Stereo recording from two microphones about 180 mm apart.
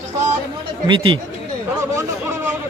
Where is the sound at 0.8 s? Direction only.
25° right (ahead or behind).